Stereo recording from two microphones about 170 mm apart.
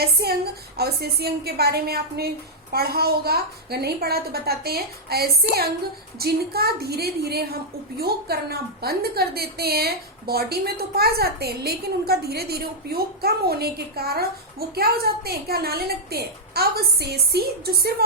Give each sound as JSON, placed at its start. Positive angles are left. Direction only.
{"t": 0.0, "sound": "a woman's voice", "side_deg": -70}